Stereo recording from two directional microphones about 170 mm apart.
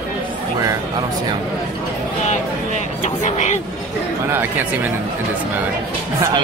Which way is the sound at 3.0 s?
45° left (ahead or behind).